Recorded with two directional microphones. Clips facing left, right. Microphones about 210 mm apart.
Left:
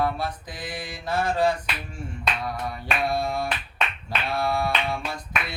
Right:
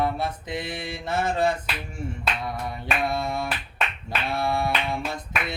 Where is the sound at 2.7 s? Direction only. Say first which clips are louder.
Even; 20° right (ahead or behind).